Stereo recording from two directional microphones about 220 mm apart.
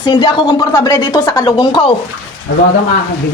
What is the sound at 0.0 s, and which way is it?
Speech, 20° left (ahead or behind).